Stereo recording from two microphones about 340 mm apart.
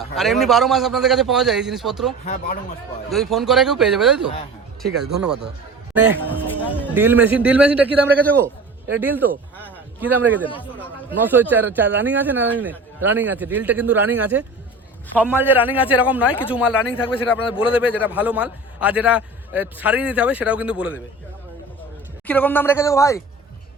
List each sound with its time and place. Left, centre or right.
0.2 s a man's voice: centre
2.2 s speech: left
3.1 s a man's voice: centre
6.3 s music: centre
6.9 s a man's voice: centre
10.5 s a man's voice: centre
11.3 s a man's voice: centre
17.7 s a man's voice: centre
22.3 s speech: centre